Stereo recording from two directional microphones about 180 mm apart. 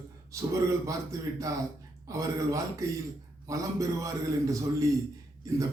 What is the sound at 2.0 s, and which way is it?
A man's voice, 20° right (ahead or behind).